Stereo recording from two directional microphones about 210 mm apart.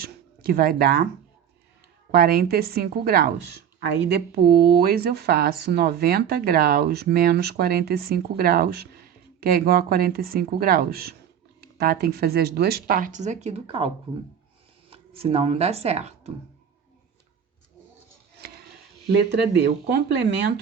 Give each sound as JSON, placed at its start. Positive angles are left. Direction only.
{"t": 0.0, "sound": "a sound", "side_deg": -45}
{"t": 2.1, "sound": "speech", "side_deg": -45}
{"t": 15.2, "sound": "speech", "side_deg": -30}
{"t": 20.1, "sound": "speech", "side_deg": -55}